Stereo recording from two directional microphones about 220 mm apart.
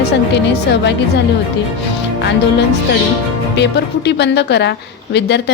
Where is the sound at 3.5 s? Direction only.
50° left (ahead or behind).